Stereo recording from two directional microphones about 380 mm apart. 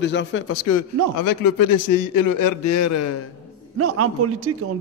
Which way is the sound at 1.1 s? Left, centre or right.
Left.